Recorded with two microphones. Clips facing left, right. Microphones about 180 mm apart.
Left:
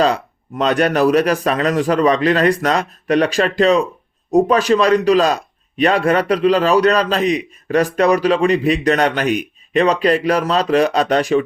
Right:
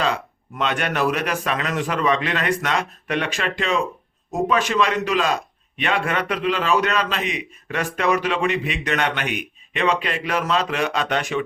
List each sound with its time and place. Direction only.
0.0 s a man's voice: 40° left (ahead or behind)